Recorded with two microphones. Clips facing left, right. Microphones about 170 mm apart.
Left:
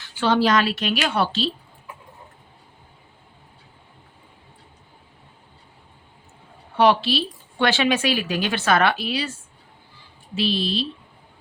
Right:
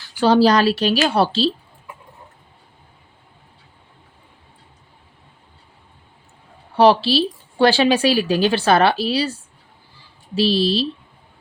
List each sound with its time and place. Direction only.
0.0 s a woman's voice: 35° right (ahead or behind)
6.7 s a woman's voice: 35° right (ahead or behind)